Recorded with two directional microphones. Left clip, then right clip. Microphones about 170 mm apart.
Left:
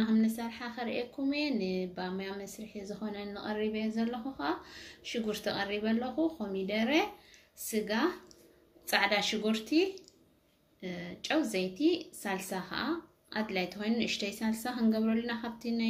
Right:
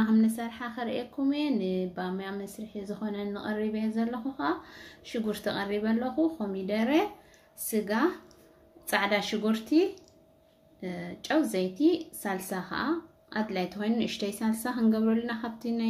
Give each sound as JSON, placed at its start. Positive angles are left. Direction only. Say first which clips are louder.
{"t": 0.0, "sound": "a woman's voice", "louder": "right 4 dB", "side_deg": -50}